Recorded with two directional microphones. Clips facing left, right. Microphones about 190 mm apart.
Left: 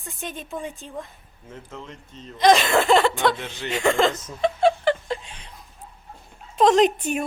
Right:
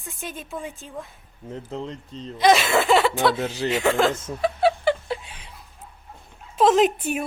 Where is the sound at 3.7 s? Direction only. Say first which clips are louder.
Left 1 dB; 5° right (ahead or behind).